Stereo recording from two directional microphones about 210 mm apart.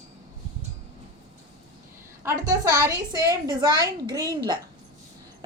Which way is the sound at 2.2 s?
15° right (ahead or behind).